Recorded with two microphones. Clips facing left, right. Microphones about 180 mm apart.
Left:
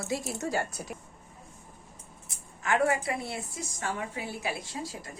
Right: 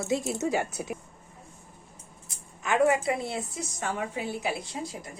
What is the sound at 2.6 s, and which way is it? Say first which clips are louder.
A woman's voice: right 3 dB; 20° right (ahead or behind).